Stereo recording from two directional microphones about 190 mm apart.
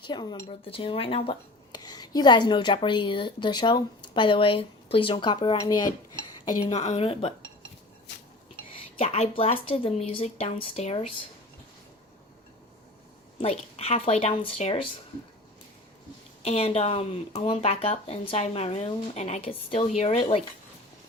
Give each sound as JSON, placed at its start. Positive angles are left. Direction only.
{"t": 0.1, "sound": "speech", "side_deg": 20}
{"t": 6.7, "sound": "speech", "side_deg": 35}
{"t": 8.7, "sound": "speech", "side_deg": 30}
{"t": 13.4, "sound": "speech", "side_deg": 30}
{"t": 16.4, "sound": "speech", "side_deg": 35}